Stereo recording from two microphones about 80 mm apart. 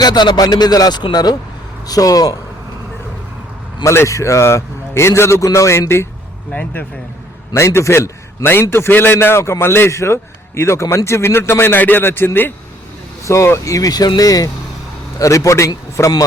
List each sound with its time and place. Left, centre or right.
0.0 s speech: left
1.9 s speech: left
3.8 s a man's voice: left
6.5 s a man's voice: centre
7.5 s a man's voice: left
8.7 s a man's voice: left